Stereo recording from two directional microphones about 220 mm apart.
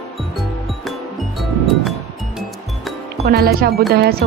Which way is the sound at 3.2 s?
45° right (ahead or behind).